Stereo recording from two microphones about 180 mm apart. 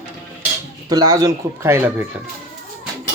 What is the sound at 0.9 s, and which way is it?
Speech, 20° right (ahead or behind).